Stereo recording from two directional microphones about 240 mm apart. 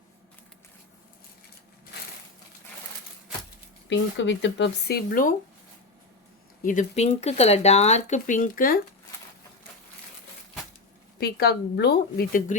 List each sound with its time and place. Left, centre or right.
3.8 s speech: left
6.6 s speech: left
11.2 s speech: left